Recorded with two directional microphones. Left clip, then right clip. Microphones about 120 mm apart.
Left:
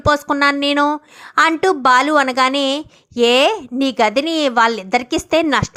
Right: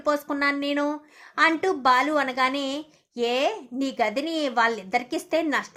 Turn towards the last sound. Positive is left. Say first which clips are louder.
# left 9 dB
turn(degrees=45)  # may be behind; listen again after turning